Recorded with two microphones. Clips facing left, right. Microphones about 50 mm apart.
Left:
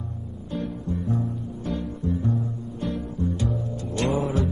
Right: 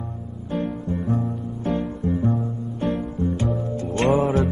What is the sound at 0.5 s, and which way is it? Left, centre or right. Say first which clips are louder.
Music: right 4 dB; right.